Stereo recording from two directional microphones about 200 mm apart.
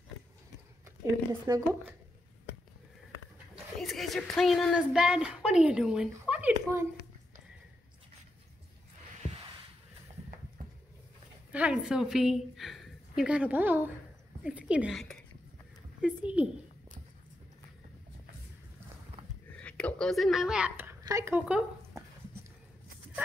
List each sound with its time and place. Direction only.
1.4 s speech: 15° right (ahead or behind)
3.7 s a woman's voice: centre (ahead or behind)
11.5 s a woman's voice: 5° right (ahead or behind)
19.5 s speech: 5° left (ahead or behind)